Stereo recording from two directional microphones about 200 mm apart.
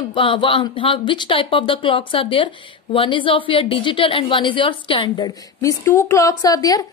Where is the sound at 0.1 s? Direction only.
25° left (ahead or behind).